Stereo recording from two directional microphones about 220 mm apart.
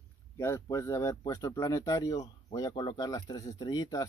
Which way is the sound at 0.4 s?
10° left (ahead or behind).